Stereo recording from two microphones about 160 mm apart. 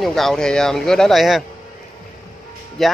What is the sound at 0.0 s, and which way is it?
Speech, centre (ahead or behind).